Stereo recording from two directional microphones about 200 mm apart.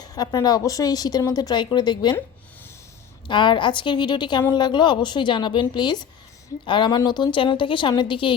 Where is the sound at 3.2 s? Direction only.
25° left (ahead or behind).